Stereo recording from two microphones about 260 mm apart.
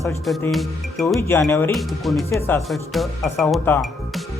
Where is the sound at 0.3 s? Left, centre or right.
Centre.